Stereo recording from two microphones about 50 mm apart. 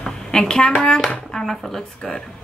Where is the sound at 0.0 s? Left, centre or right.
Centre.